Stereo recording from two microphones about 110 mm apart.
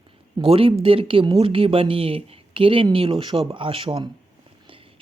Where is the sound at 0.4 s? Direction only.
55° right (ahead or behind).